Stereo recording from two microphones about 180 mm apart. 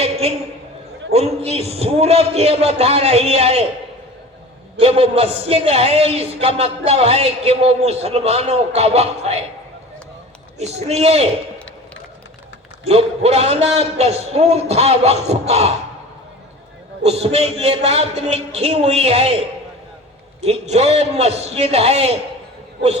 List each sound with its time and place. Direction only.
0.0 s a sound: 35° right (ahead or behind)
1.1 s a man's voice: 35° right (ahead or behind)
4.8 s a man's voice: 35° right (ahead or behind)
10.6 s a man's voice: 40° right (ahead or behind)
12.8 s a man's voice: 35° right (ahead or behind)
17.0 s a man's voice: 35° right (ahead or behind)
20.4 s a man's voice: 40° right (ahead or behind)